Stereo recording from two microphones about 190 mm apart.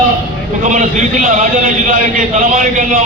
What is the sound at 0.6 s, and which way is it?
A man's voice, 40° right (ahead or behind).